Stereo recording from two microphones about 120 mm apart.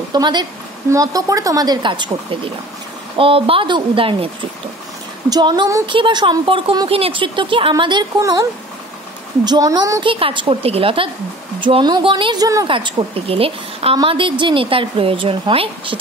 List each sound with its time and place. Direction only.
0.1 s speech: 35° right (ahead or behind)
5.3 s speech: 35° right (ahead or behind)
10.0 s speech: 45° right (ahead or behind)